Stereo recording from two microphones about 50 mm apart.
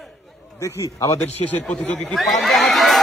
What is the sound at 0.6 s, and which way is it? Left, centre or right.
Speech, left.